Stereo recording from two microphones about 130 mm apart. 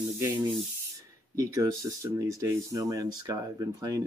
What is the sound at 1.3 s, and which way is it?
Speech, 25° right (ahead or behind).